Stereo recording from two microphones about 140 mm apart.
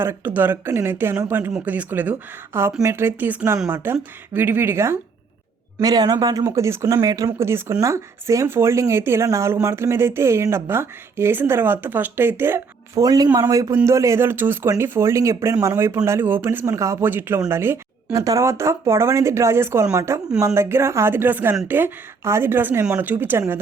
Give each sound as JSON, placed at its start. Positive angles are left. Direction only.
{"t": 0.0, "sound": "a woman's voice", "side_deg": -15}